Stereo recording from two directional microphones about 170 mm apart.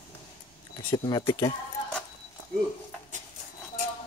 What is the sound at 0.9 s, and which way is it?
Speech, 30° left (ahead or behind).